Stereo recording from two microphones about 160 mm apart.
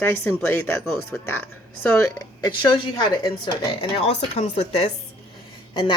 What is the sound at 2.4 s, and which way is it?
A woman's voice, 25° left (ahead or behind).